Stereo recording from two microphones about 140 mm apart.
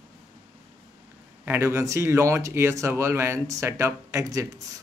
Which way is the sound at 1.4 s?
20° right (ahead or behind).